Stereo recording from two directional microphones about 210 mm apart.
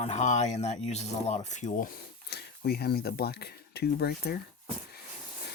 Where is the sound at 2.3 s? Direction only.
50° left (ahead or behind).